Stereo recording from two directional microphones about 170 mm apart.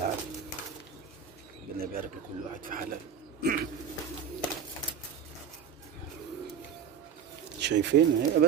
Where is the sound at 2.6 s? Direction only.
55° right (ahead or behind).